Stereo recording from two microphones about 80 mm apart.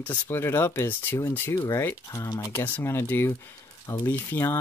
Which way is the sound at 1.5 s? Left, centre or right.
Left.